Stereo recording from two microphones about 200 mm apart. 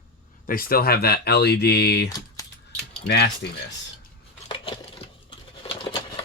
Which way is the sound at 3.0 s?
55° left (ahead or behind).